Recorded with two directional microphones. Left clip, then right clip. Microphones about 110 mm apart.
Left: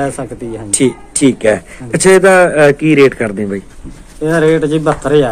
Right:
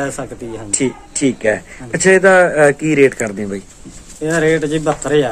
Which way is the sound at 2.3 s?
5° left (ahead or behind).